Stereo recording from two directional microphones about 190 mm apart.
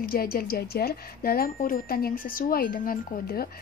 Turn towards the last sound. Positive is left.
turn(degrees=50)  # may be behind; listen again after turning